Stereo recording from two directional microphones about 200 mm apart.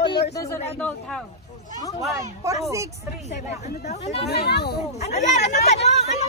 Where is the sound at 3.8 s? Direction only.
35° left (ahead or behind).